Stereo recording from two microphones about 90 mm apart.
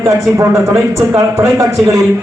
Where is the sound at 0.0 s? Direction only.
35° right (ahead or behind).